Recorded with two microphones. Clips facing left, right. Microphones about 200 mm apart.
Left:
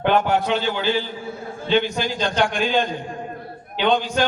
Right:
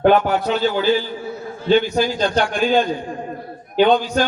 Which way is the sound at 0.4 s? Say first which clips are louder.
Right 4 dB; 40° right (ahead or behind).